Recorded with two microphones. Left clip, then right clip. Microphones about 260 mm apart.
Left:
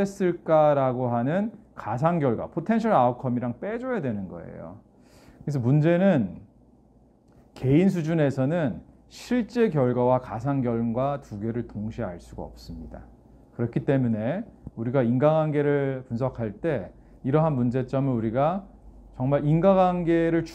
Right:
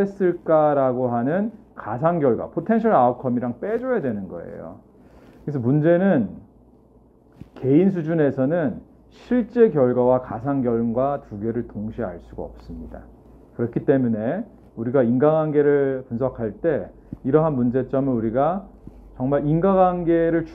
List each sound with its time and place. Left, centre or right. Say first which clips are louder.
0.0 s a man's voice: right 5 dB; left
7.5 s a man's voice: right 4 dB; left